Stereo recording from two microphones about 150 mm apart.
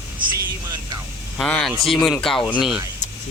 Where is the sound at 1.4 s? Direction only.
5° left (ahead or behind).